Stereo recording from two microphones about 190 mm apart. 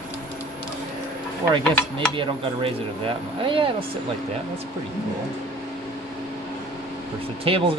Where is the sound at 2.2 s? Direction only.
25° right (ahead or behind).